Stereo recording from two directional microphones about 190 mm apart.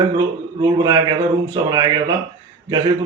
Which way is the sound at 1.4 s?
20° right (ahead or behind).